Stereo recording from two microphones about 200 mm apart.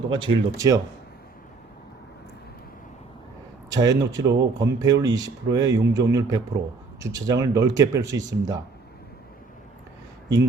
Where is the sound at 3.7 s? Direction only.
20° right (ahead or behind).